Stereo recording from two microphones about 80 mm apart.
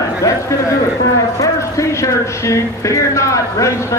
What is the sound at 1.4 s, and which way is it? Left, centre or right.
Speech, left.